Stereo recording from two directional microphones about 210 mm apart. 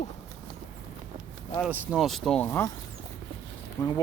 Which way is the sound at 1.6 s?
5° right (ahead or behind).